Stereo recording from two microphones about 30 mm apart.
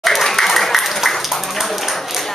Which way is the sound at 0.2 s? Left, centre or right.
Centre.